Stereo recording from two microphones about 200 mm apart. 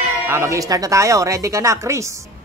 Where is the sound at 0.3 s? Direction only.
15° right (ahead or behind).